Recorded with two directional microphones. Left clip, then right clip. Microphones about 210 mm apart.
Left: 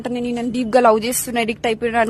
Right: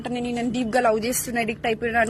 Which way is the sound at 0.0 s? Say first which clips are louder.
Left 4 dB; 35° left (ahead or behind).